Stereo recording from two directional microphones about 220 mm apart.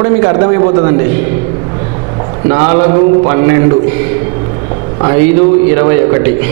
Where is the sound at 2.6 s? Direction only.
25° right (ahead or behind).